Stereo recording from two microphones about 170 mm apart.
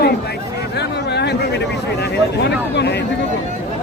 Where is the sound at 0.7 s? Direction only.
80° left.